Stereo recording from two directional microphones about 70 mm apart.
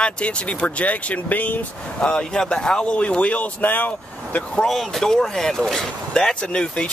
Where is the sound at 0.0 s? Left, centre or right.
Centre.